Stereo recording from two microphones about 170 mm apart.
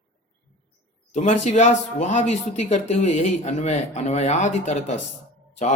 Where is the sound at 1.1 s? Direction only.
45° left (ahead or behind).